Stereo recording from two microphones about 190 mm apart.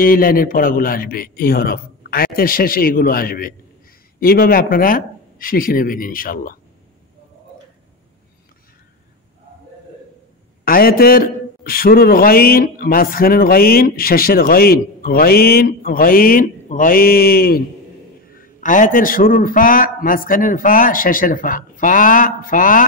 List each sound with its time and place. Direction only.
0.0 s a man's voice: 50° left (ahead or behind)
10.6 s a man's voice: 50° left (ahead or behind)